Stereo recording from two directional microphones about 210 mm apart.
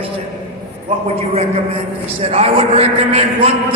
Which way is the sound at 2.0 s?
30° right (ahead or behind).